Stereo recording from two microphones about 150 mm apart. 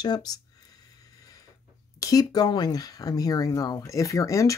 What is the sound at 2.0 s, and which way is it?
Speech, 25° left (ahead or behind).